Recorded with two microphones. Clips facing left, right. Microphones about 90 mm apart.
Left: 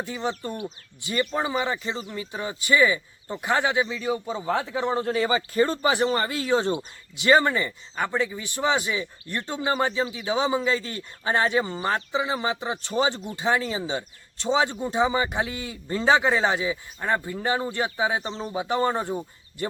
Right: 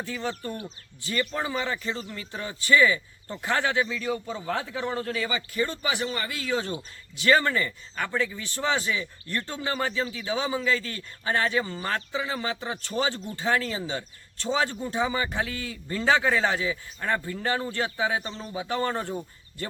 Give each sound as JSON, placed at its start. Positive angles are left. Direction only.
{"t": 0.0, "sound": "speech", "side_deg": 20}
{"t": 6.7, "sound": "speech", "side_deg": 20}